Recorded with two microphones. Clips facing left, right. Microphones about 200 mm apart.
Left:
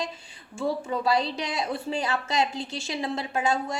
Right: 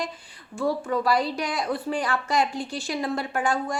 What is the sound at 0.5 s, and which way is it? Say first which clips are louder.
A woman's voice: right 3 dB; 25° left (ahead or behind).